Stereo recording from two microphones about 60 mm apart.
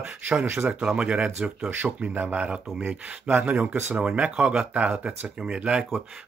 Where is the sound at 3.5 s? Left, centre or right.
Right.